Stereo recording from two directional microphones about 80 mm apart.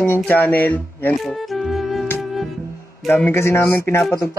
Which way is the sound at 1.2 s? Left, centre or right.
Centre.